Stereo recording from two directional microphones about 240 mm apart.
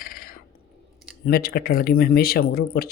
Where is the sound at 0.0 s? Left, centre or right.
Left.